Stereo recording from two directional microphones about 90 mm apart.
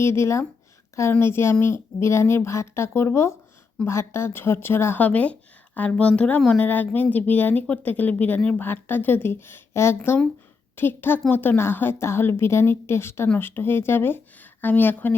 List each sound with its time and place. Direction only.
0.0 s speech: 30° left (ahead or behind)